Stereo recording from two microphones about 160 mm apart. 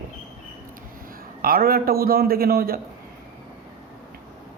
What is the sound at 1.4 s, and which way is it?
Speech, 70° right (ahead or behind).